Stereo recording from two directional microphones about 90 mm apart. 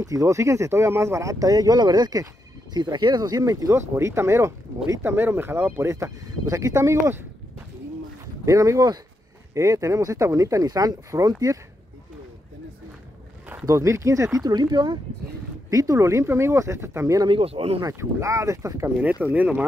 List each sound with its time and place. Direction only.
0.0 s speech: 40° right (ahead or behind)
5.1 s speech: 25° right (ahead or behind)
8.5 s speech: 35° right (ahead or behind)
13.7 s speech: 35° right (ahead or behind)
14.4 s speech: 55° right (ahead or behind)
15.7 s speech: 40° right (ahead or behind)
17.3 s speech: 90° right
17.9 s speech: 35° right (ahead or behind)
19.2 s speech: 15° right (ahead or behind)